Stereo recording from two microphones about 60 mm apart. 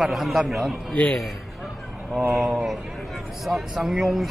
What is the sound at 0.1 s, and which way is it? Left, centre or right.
Speech, centre.